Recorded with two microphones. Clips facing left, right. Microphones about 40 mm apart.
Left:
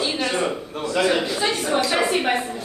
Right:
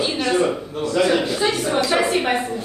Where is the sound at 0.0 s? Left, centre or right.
Centre.